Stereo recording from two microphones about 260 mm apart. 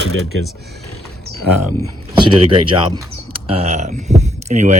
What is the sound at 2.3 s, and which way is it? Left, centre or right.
Speech, right.